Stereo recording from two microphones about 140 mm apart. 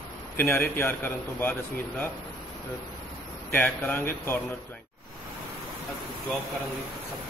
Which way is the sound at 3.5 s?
15° left (ahead or behind).